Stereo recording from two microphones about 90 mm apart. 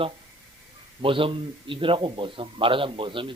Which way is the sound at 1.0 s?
80° right.